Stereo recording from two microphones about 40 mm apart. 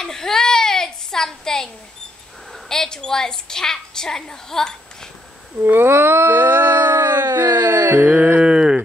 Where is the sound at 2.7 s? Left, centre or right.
Centre.